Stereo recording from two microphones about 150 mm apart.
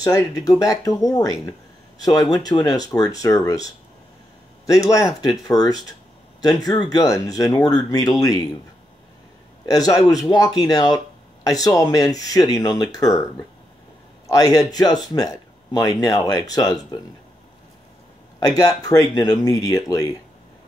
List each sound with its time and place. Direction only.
0.0 s speech: 25° left (ahead or behind)
9.7 s speech: 25° left (ahead or behind)
18.5 s speech: 25° left (ahead or behind)